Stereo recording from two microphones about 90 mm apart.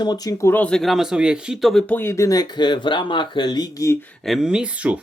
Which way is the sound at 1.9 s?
25° left (ahead or behind).